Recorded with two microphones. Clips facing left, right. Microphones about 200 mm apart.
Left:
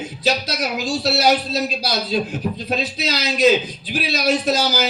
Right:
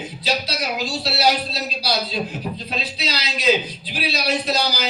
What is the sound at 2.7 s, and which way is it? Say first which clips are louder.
A man's voice: left 6 dB; 45° left (ahead or behind).